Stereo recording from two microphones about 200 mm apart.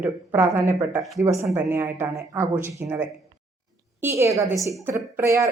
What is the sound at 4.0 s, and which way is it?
A woman's voice, 10° right (ahead or behind).